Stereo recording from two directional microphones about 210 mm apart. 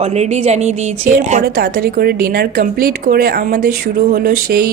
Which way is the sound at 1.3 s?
45° right (ahead or behind).